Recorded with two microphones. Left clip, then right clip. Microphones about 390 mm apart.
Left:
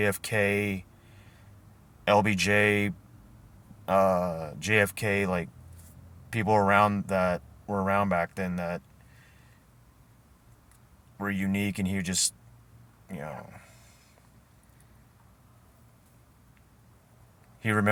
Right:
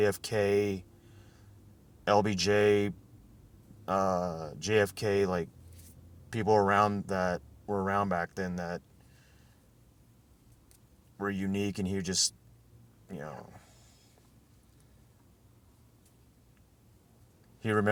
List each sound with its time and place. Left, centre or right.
0.0 s speech: right
2.0 s speech: right
11.2 s speech: right
17.6 s speech: right